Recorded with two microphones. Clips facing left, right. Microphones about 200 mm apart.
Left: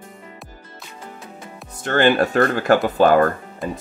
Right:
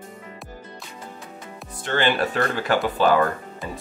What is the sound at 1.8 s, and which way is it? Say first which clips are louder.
Speech: left 6 dB; 45° left (ahead or behind).